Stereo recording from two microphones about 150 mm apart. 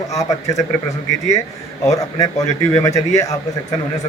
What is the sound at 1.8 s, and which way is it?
Speech, 20° left (ahead or behind).